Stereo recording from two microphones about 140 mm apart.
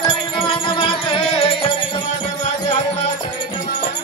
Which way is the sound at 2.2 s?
55° left (ahead or behind).